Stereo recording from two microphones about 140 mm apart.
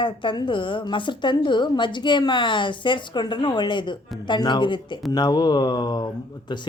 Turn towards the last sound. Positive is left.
turn(degrees=30)  # may be behind; listen again after turning